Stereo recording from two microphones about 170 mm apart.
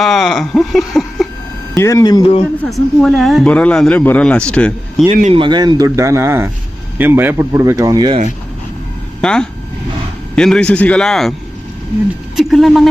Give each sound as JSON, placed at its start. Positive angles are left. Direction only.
{"t": 0.0, "sound": "speech", "side_deg": 0}
{"t": 1.7, "sound": "speech", "side_deg": 20}
{"t": 2.6, "sound": "speech", "side_deg": 0}
{"t": 5.3, "sound": "speech", "side_deg": -30}
{"t": 9.2, "sound": "speech", "side_deg": 5}
{"t": 12.4, "sound": "speech", "side_deg": 0}